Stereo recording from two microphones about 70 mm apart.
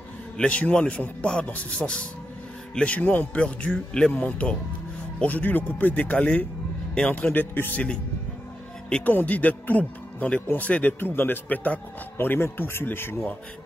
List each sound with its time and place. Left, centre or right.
0.4 s speech: centre
7.3 s speech: left
8.8 s speech: centre
12.2 s speech: left